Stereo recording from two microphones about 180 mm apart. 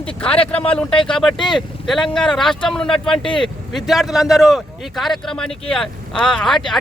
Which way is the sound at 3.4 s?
Centre (ahead or behind).